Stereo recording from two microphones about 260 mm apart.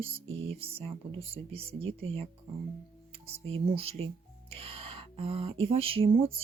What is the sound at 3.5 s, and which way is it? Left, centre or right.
Speech, right.